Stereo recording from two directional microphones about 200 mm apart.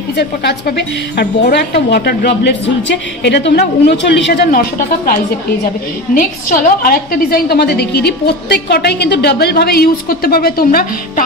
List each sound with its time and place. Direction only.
0.2 s speech: 55° left (ahead or behind)
6.1 s a woman's voice: 45° left (ahead or behind)